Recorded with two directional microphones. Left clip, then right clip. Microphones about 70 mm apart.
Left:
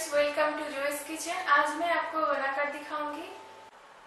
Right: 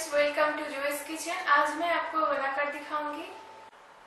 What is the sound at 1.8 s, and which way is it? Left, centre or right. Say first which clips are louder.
Speech: right 1 dB; centre.